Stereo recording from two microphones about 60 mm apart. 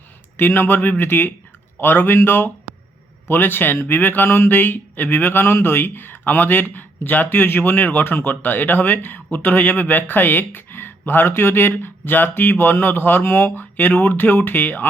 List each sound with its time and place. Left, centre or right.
0.3 s speech: left